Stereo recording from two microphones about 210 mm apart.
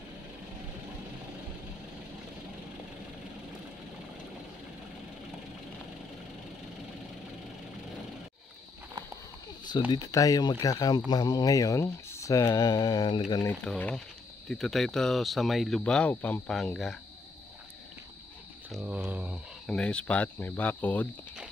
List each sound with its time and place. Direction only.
9.8 s speech: 20° left (ahead or behind)
13.7 s speech: 5° left (ahead or behind)
18.7 s speech: 5° right (ahead or behind)